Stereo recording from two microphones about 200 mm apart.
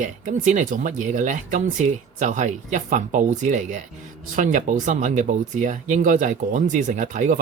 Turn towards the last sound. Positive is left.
turn(degrees=-40)  # may be behind; listen again after turning